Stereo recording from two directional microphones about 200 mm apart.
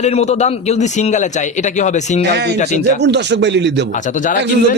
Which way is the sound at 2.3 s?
55° right (ahead or behind).